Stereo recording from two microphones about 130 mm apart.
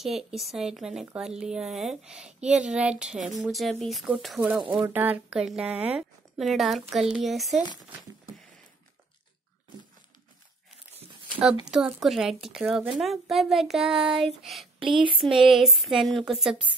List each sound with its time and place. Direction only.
0.0 s speech: centre (ahead or behind)
3.2 s speech: 70° right (ahead or behind)
3.5 s speech: centre (ahead or behind)
4.5 s speech: 10° right (ahead or behind)
11.6 s speech: 5° right (ahead or behind)
14.8 s speech: 40° right (ahead or behind)
15.2 s speech: centre (ahead or behind)